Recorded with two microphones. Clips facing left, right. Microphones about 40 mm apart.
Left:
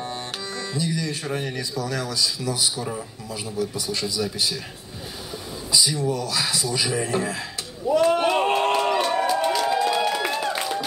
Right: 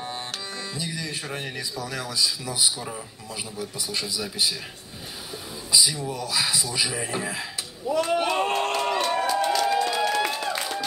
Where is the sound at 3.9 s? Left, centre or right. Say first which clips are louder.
Left 4 dB; centre.